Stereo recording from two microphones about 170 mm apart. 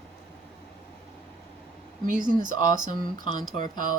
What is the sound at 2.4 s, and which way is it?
Speech, 50° right (ahead or behind).